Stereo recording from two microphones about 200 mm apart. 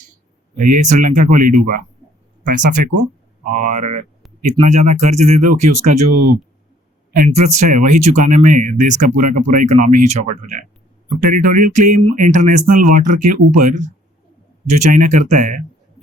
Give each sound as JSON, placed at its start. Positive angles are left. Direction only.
{"t": 0.5, "sound": "speech", "side_deg": -40}
{"t": 7.3, "sound": "speech", "side_deg": -35}